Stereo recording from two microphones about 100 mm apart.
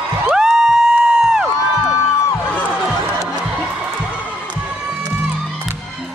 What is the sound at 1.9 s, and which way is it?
Music, 25° left (ahead or behind).